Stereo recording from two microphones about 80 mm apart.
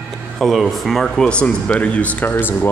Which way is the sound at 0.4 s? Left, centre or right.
Centre.